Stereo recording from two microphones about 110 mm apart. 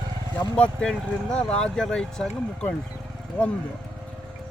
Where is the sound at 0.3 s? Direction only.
10° left (ahead or behind).